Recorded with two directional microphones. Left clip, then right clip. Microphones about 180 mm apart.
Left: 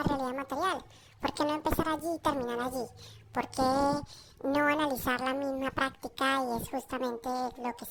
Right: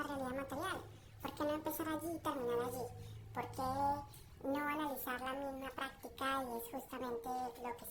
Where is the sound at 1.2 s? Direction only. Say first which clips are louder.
Left 9 dB; 45° left (ahead or behind).